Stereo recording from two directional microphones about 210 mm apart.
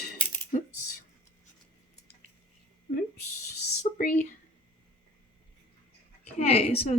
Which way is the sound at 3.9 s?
30° left (ahead or behind).